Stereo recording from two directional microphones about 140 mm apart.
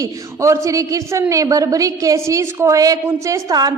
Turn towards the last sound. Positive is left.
turn(degrees=-25)  # may be behind; listen again after turning